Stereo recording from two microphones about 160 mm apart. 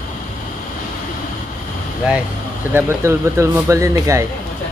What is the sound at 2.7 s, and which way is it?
Speech, 15° right (ahead or behind).